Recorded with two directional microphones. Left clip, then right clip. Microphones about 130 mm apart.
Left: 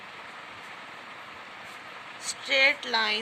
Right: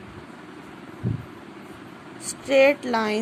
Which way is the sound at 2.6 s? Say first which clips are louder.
Right 5 dB; 55° right (ahead or behind).